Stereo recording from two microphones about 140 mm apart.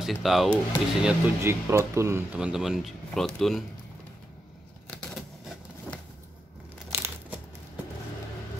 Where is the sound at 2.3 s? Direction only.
5° right (ahead or behind).